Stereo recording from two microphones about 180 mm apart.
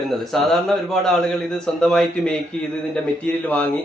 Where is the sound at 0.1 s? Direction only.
Centre (ahead or behind).